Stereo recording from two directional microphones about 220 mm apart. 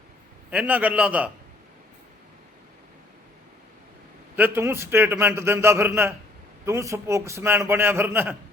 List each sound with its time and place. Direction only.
0.5 s a man's voice: 5° right (ahead or behind)
4.4 s a man's voice: 10° right (ahead or behind)